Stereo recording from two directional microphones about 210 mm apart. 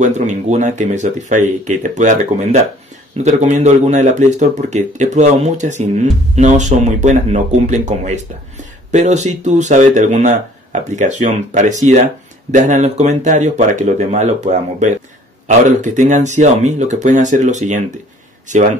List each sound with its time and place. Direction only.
0.0 s speech: 35° right (ahead or behind)